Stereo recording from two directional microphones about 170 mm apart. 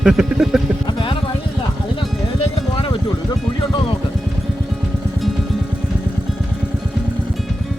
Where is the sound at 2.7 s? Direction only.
30° left (ahead or behind).